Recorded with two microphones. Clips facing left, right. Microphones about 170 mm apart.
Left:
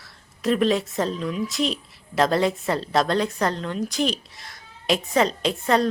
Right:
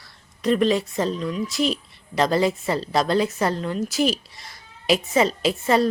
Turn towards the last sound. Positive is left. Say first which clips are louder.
# right 1 dB
turn(degrees=-5)  # may be behind; listen again after turning